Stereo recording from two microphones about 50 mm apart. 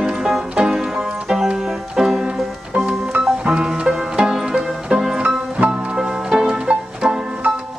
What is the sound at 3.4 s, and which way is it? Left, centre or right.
Music, centre.